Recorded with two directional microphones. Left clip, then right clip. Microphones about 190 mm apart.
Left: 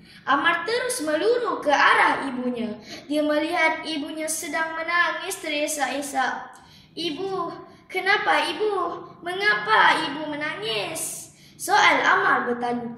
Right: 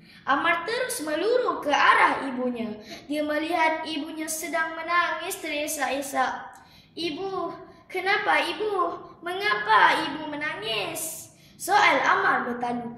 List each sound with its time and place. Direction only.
0.2 s a woman's voice: 10° right (ahead or behind)
7.9 s a woman's voice: 10° right (ahead or behind)